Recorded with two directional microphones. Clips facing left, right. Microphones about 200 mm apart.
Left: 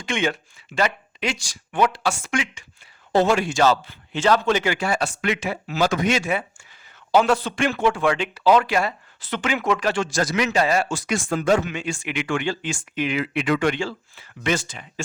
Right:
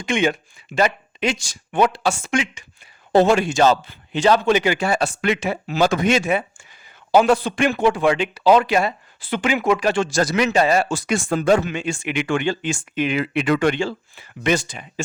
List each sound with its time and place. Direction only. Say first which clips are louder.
0.0 s a man's voice: right 4 dB; 15° right (ahead or behind)
4.9 s a man's voice: right 3 dB; 30° right (ahead or behind); by 10.0 s 15° right (ahead or behind)
10.0 s a man's voice: right 3 dB; 30° right (ahead or behind)
13.7 s a man's voice: right 4 dB; 20° right (ahead or behind)